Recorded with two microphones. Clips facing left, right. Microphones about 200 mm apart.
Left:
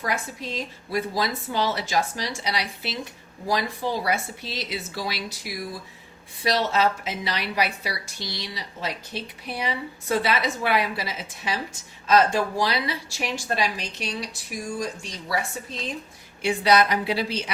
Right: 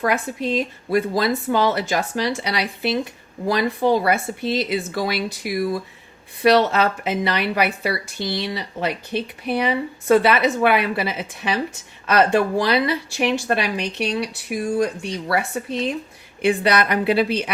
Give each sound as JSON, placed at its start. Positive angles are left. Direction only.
{"t": 0.0, "sound": "a woman's voice", "side_deg": -60}